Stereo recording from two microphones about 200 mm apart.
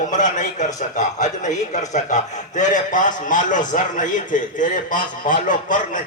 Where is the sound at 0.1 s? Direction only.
40° left (ahead or behind).